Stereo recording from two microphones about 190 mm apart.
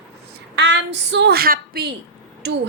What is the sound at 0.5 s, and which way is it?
A woman's voice, 65° right (ahead or behind).